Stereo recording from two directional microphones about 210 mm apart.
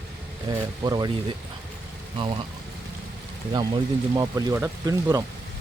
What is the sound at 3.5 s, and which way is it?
Speech, 20° right (ahead or behind).